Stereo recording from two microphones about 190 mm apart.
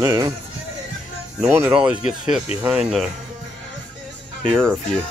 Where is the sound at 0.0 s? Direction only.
20° right (ahead or behind).